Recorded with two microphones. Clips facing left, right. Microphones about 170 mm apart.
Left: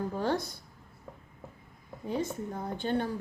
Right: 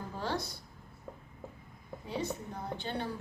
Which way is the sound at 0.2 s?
50° left (ahead or behind).